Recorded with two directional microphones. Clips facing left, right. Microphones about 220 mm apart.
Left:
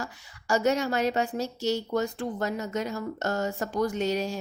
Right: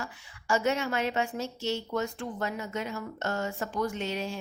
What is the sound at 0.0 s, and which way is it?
Speech, 40° left (ahead or behind).